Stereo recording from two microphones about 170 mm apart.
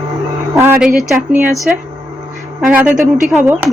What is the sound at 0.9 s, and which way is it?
Speech, centre (ahead or behind).